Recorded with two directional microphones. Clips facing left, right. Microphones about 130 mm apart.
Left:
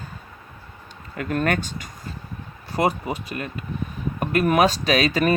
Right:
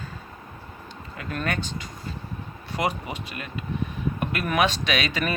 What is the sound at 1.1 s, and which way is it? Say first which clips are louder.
Speech: left 6 dB; 50° left (ahead or behind).